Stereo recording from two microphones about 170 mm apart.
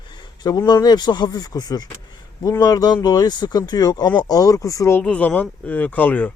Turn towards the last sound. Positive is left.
turn(degrees=10)  # may be behind; listen again after turning